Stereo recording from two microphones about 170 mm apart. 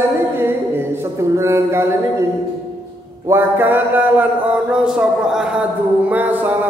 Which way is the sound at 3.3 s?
10° right (ahead or behind).